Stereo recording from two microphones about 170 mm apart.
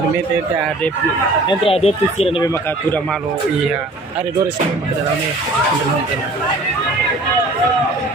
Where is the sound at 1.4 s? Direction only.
35° left (ahead or behind).